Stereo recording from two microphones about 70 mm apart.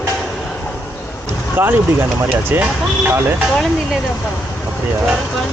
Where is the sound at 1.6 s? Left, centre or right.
Right.